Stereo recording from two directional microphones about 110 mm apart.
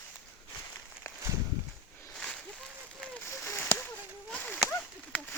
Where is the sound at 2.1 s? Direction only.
5° left (ahead or behind).